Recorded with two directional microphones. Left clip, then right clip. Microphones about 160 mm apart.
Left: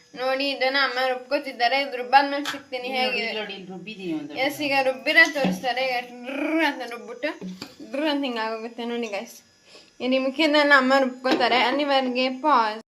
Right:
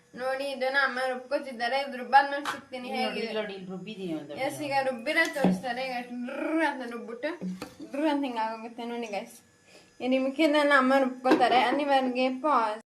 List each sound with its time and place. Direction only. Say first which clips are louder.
0.2 s speech: left 6 dB; 5° left (ahead or behind)
4.4 s a woman's voice: left 6 dB; 15° left (ahead or behind)